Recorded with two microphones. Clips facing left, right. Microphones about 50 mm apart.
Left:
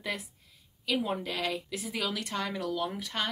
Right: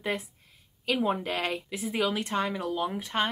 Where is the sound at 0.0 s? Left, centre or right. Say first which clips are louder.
Right 4 dB; right.